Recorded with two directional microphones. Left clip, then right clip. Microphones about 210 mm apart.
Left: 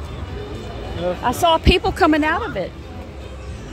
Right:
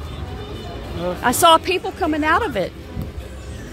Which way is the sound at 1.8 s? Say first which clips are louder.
Left 6 dB; 15° left (ahead or behind).